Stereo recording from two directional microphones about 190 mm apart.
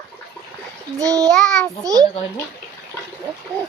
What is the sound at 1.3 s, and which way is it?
Child singing, centre (ahead or behind).